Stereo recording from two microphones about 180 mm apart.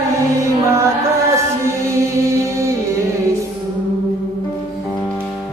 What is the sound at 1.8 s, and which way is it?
Music, 15° right (ahead or behind).